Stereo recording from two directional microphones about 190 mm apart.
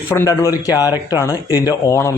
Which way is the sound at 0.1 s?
15° left (ahead or behind).